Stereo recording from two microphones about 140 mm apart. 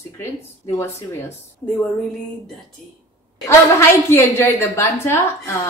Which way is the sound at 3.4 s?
15° left (ahead or behind).